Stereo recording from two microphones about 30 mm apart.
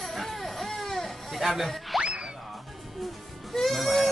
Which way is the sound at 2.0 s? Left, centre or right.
Right.